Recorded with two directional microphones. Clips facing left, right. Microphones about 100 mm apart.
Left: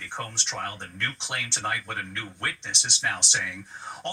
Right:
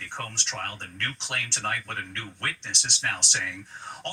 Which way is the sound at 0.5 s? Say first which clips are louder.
Left 2 dB; 15° left (ahead or behind).